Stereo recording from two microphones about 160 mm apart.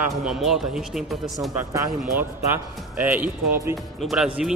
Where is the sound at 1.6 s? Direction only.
15° right (ahead or behind).